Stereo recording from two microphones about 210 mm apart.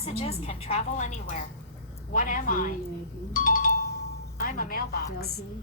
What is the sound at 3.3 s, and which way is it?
Music, 40° left (ahead or behind).